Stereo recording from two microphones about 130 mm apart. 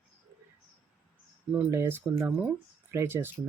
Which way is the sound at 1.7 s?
20° right (ahead or behind).